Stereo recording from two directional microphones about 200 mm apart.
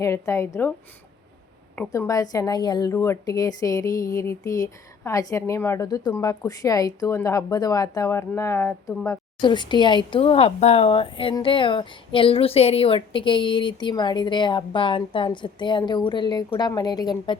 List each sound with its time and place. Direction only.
0.0 s speech: 15° left (ahead or behind)
1.9 s speech: 15° left (ahead or behind)